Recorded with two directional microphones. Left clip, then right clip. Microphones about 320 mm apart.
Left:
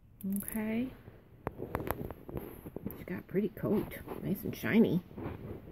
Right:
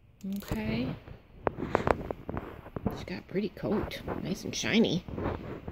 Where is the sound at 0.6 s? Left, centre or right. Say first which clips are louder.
Right 2 dB; centre.